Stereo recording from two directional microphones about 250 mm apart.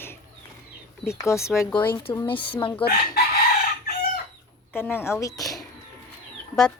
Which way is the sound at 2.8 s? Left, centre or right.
Left.